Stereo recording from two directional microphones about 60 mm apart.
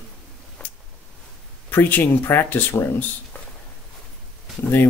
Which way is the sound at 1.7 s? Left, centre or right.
Left.